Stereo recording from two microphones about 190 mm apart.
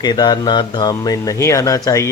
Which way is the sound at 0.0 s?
20° left (ahead or behind).